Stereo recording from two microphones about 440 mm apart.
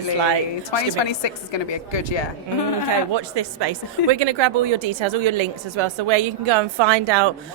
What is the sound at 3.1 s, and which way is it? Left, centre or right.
A woman's voice, right.